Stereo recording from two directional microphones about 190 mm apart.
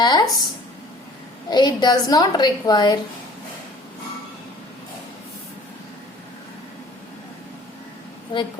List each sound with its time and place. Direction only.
0.0 s a sound: 20° left (ahead or behind)
1.5 s a woman's voice: 20° left (ahead or behind)
8.3 s a woman's voice: 25° left (ahead or behind)